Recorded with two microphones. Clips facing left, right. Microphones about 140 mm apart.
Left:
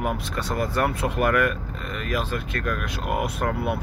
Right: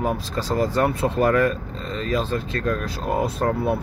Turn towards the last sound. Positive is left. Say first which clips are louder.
# right 4 dB
turn(degrees=-30)  # may be behind; listen again after turning